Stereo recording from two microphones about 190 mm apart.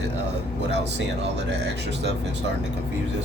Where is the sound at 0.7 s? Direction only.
65° right (ahead or behind).